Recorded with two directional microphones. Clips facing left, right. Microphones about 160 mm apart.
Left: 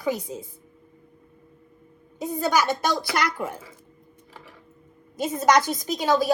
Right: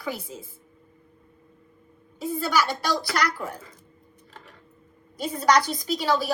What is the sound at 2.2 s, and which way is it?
Speech, 45° left (ahead or behind).